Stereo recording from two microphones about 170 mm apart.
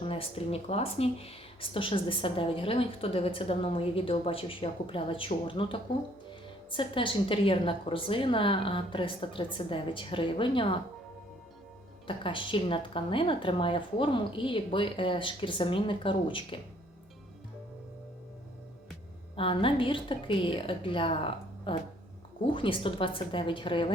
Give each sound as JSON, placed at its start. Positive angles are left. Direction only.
{"t": 0.0, "sound": "speech", "side_deg": 35}
{"t": 12.0, "sound": "speech", "side_deg": 30}
{"t": 19.4, "sound": "speech", "side_deg": 30}